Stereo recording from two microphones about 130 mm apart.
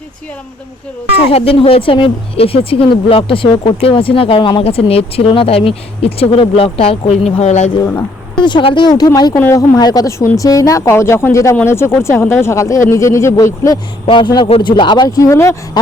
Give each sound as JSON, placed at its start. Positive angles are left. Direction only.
{"t": 1.3, "sound": "speech", "side_deg": 50}
{"t": 8.4, "sound": "speech", "side_deg": 35}
{"t": 9.3, "sound": "speech", "side_deg": 20}
{"t": 14.1, "sound": "speech", "side_deg": 40}